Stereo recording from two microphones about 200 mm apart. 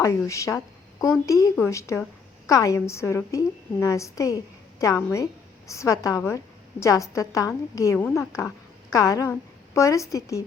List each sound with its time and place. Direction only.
0.0 s a woman's voice: 15° left (ahead or behind)